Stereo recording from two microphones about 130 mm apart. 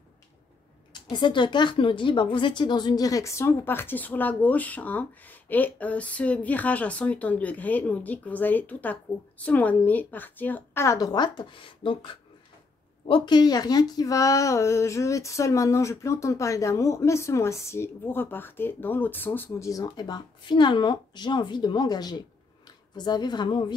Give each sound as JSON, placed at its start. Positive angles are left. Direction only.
{"t": 1.1, "sound": "a woman's voice", "side_deg": 35}
{"t": 19.7, "sound": "speech", "side_deg": 30}